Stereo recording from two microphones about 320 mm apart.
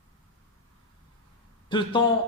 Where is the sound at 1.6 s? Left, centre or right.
Centre.